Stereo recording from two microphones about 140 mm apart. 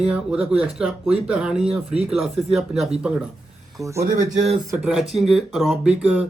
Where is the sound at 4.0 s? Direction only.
50° right (ahead or behind).